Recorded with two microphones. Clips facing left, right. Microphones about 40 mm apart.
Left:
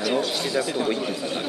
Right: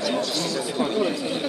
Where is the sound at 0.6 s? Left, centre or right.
Centre.